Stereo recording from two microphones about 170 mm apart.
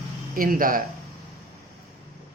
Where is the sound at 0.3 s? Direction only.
55° right (ahead or behind).